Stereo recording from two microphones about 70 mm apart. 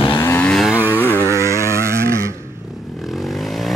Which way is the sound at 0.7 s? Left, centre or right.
Right.